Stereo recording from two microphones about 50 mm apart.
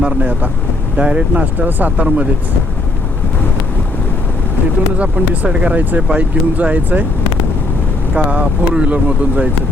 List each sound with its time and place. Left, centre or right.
0.0 s speech: right
1.5 s speech: right
4.9 s speech: right
8.1 s speech: right